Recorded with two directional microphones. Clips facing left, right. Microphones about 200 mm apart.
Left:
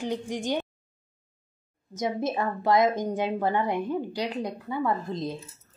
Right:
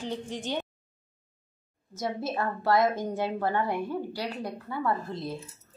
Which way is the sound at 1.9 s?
15° left (ahead or behind).